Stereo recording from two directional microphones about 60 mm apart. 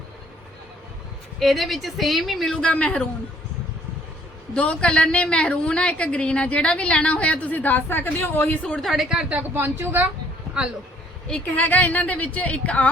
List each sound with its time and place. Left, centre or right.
1.4 s speech: centre
2.4 s speech: centre
4.5 s a woman's voice: centre; by 8.5 s left
8.8 s speech: centre
9.3 s speech: right
11.3 s a woman's voice: centre